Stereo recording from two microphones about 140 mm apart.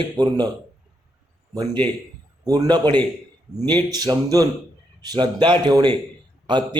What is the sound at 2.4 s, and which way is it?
A man's voice, 25° right (ahead or behind).